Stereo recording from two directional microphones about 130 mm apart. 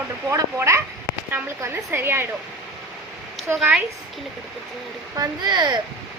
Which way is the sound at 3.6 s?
10° right (ahead or behind).